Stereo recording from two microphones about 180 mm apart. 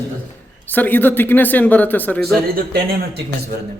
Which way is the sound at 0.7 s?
10° left (ahead or behind).